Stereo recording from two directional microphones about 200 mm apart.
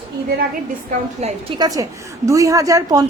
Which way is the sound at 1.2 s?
35° right (ahead or behind).